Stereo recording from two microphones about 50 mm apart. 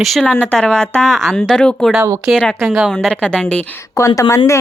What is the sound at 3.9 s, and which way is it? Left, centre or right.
Speech, left.